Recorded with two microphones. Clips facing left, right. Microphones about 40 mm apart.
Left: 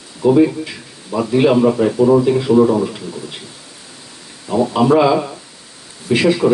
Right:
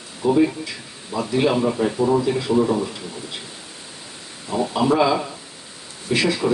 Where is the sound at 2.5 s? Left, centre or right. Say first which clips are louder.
Left 7 dB; left.